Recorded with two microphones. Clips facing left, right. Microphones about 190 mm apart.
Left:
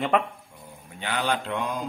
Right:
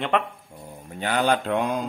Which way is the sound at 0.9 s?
45° right (ahead or behind).